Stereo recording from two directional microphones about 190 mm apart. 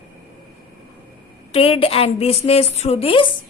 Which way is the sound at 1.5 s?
30° left (ahead or behind).